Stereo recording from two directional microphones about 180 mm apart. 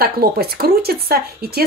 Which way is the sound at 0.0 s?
60° right (ahead or behind).